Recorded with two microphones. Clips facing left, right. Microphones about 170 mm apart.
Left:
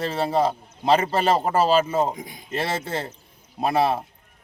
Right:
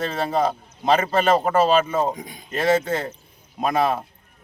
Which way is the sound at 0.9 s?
30° left (ahead or behind).